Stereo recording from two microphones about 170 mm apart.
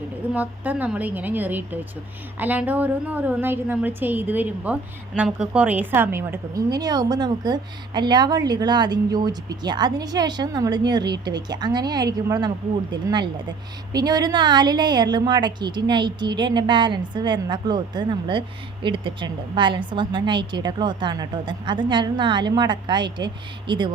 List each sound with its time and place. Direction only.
0.3 s a woman's voice: 10° right (ahead or behind); by 23.9 s 25° right (ahead or behind)